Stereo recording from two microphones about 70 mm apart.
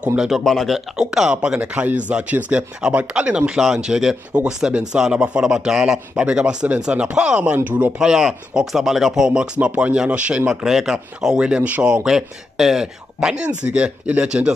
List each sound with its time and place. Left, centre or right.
0.0 s speech: centre
0.3 s speech: centre
0.7 s speech: centre; by 7.9 s right
8.0 s speech: centre